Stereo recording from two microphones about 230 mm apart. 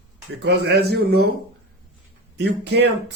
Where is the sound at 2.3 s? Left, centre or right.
Right.